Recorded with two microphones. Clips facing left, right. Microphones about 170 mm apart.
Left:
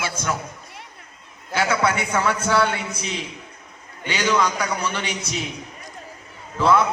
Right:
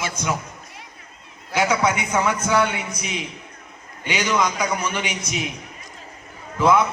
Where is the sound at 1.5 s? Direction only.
15° right (ahead or behind).